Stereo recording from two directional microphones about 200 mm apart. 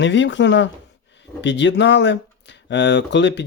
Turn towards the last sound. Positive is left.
turn(degrees=60)  # may be behind; listen again after turning